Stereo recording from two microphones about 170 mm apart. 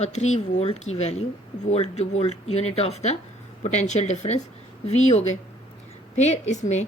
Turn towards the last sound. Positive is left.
turn(degrees=45)  # may be behind; listen again after turning